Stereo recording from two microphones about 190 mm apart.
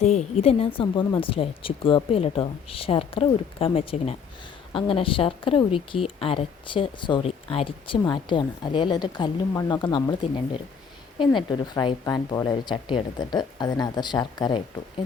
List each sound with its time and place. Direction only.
0.0 s speech: 35° left (ahead or behind)